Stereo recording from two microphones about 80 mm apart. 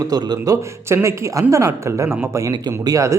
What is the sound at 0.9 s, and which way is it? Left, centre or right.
A man's voice, right.